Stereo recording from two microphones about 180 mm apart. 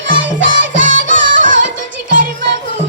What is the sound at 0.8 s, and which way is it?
Music, 45° right (ahead or behind).